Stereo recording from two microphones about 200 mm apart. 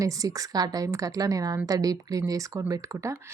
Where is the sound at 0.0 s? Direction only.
15° right (ahead or behind).